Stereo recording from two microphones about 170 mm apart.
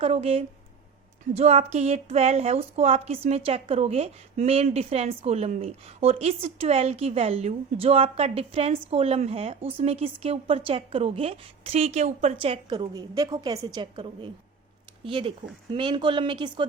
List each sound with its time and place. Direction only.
0.0 s a woman's voice: 35° right (ahead or behind)